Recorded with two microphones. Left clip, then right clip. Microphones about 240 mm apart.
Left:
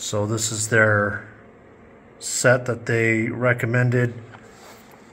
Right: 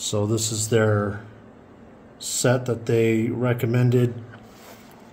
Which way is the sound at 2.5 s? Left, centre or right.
Centre.